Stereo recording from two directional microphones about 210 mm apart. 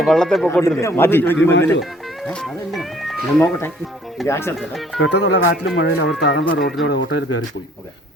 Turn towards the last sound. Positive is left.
turn(degrees=60)  # may be behind; listen again after turning